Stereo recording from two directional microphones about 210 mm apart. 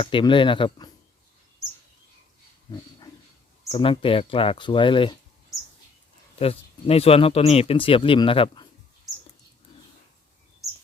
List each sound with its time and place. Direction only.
0.0 s speech: 25° left (ahead or behind)
3.7 s speech: 25° left (ahead or behind)
6.4 s speech: 30° left (ahead or behind)